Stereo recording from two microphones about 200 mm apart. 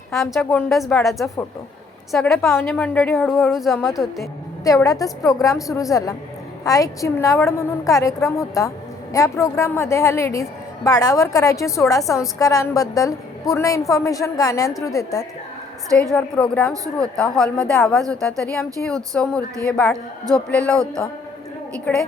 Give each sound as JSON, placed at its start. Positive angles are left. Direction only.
{"t": 0.1, "sound": "a woman's voice", "side_deg": 0}
{"t": 4.6, "sound": "a woman's voice", "side_deg": 15}
{"t": 15.9, "sound": "a woman's voice", "side_deg": 5}
{"t": 21.9, "sound": "a woman's voice", "side_deg": 10}